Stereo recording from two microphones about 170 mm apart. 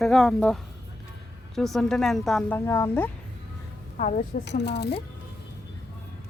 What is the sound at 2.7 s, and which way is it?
Speech, 15° left (ahead or behind).